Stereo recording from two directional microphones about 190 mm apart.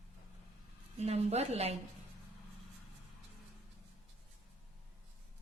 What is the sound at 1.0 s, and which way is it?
Speech, 35° right (ahead or behind).